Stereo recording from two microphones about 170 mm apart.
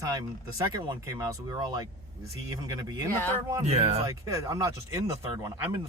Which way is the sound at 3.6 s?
35° right (ahead or behind).